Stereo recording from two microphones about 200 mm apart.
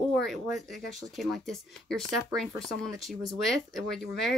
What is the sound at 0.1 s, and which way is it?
Speech, centre (ahead or behind).